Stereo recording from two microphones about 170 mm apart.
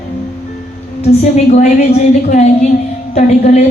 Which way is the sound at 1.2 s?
40° left (ahead or behind).